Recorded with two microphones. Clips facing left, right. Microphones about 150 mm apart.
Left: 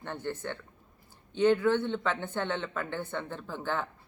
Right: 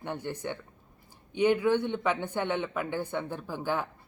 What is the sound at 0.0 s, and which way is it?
Speech, 15° right (ahead or behind).